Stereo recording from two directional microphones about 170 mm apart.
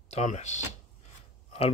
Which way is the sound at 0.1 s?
45° left (ahead or behind).